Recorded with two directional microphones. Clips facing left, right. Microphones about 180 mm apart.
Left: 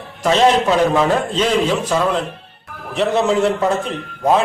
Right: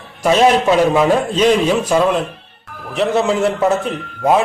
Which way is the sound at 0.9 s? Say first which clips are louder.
Right 2 dB; 15° right (ahead or behind).